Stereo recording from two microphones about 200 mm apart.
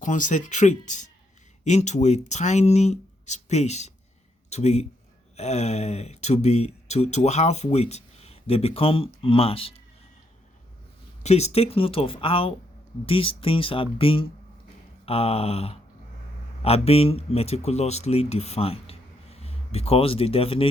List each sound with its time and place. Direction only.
0.0 s speech: 40° left (ahead or behind)
11.2 s speech: 35° left (ahead or behind)